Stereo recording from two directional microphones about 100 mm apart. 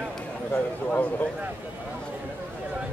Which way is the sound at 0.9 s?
15° left (ahead or behind).